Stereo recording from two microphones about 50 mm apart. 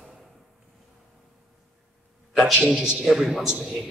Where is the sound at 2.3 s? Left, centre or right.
Centre.